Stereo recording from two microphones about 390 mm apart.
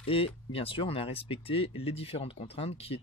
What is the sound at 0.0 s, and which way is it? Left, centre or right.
Speech, centre.